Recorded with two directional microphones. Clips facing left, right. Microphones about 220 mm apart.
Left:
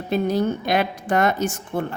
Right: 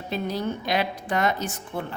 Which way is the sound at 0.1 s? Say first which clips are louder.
Left 7 dB; 50° left (ahead or behind).